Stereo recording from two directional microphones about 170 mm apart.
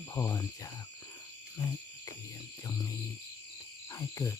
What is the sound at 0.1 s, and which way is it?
Speech, 20° left (ahead or behind).